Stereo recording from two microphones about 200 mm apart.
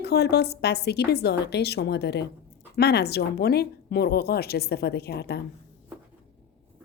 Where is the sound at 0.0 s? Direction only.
55° left (ahead or behind).